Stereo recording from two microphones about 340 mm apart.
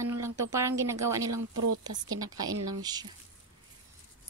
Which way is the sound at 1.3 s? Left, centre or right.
Right.